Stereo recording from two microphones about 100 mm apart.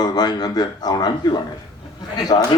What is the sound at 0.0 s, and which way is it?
A man's voice, 45° left (ahead or behind).